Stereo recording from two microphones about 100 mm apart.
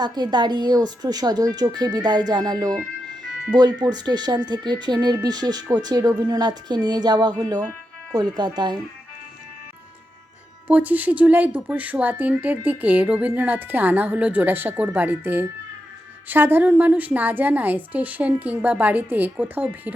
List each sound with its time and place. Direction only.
0.0 s speech: 45° right (ahead or behind)
10.7 s speech: 15° right (ahead or behind)